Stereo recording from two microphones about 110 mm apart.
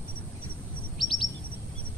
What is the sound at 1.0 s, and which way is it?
Bird vocalization, centre (ahead or behind).